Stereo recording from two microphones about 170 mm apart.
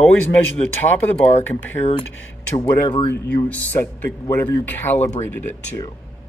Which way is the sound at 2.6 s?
25° left (ahead or behind).